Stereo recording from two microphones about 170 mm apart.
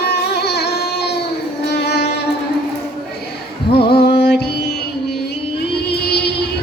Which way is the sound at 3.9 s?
70° left (ahead or behind).